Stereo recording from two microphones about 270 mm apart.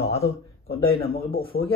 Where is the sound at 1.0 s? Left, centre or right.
Left.